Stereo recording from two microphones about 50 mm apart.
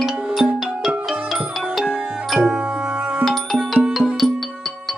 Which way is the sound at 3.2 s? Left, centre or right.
Centre.